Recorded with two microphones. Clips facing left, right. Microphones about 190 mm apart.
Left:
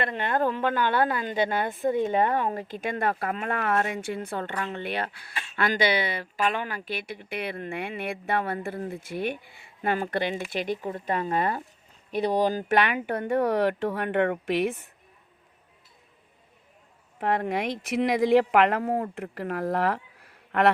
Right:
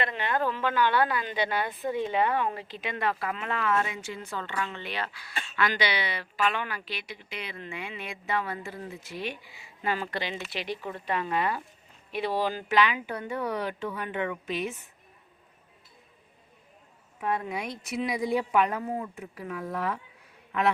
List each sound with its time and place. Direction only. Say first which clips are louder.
0.0 s a woman's voice: left 3 dB; 50° left (ahead or behind)
17.2 s speech: left 5 dB; 65° left (ahead or behind)
18.2 s speech: left 6 dB; 90° left; by 20.7 s 70° left (ahead or behind)